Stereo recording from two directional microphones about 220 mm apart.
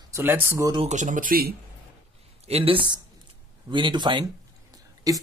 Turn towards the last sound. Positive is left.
turn(degrees=-15)  # may be behind; listen again after turning